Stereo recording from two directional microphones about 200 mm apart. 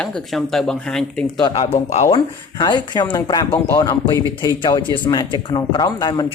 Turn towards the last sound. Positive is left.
turn(degrees=20)  # may be behind; listen again after turning